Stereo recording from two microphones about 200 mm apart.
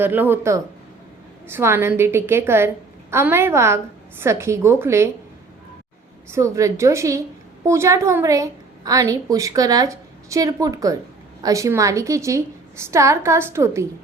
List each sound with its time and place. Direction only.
0.0 s a woman's voice: 10° right (ahead or behind)
6.3 s a woman's voice: 15° right (ahead or behind)